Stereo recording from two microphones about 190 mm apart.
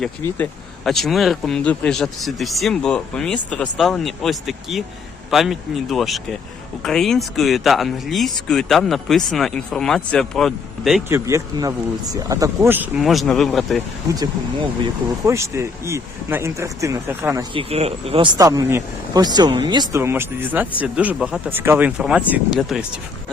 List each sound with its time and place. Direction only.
0.9 s speech: centre (ahead or behind)
11.1 s speech: 15° right (ahead or behind); by 13.8 s centre (ahead or behind)
14.2 s speech: 20° right (ahead or behind)
17.5 s speech: 30° right (ahead or behind)
18.3 s speech: 20° right (ahead or behind)
20.0 s speech: 10° right (ahead or behind)